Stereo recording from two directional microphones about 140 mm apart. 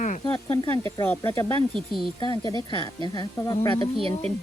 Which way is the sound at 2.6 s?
30° left (ahead or behind).